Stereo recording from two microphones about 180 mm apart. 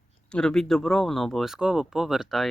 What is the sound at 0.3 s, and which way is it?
Speech, 5° left (ahead or behind).